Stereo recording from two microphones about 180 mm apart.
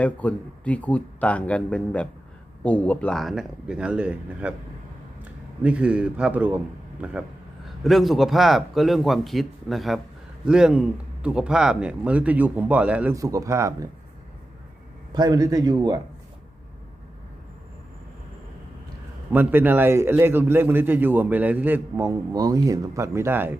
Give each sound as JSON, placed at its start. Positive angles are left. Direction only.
{"t": 0.0, "sound": "a man's voice", "side_deg": 10}
{"t": 13.1, "sound": "a man's voice", "side_deg": -20}
{"t": 15.1, "sound": "a man's voice", "side_deg": -20}
{"t": 19.3, "sound": "a man's voice", "side_deg": -10}